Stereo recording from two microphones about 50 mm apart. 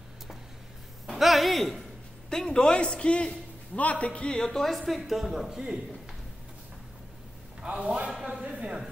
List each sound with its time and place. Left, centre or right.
1.1 s a sound: centre
2.2 s a man's voice: centre
4.4 s a woman's voice: centre
7.6 s a man's voice: centre